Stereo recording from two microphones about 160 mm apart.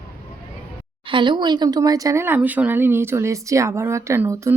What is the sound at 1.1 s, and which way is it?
Speech, 30° right (ahead or behind).